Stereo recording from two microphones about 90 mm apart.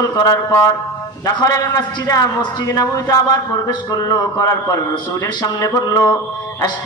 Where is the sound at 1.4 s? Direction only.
40° left (ahead or behind).